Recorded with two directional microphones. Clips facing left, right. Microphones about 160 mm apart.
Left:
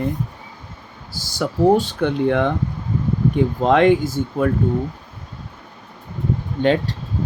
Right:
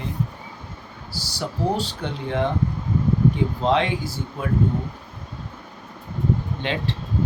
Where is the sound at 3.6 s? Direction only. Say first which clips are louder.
Left 8 dB; 50° left (ahead or behind).